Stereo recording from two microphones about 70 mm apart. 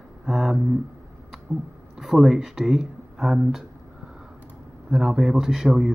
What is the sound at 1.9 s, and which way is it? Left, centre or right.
Speech, centre.